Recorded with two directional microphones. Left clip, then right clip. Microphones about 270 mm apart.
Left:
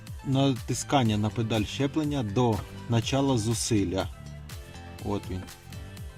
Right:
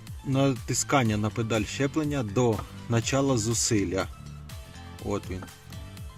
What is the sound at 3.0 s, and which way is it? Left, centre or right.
Speech, centre.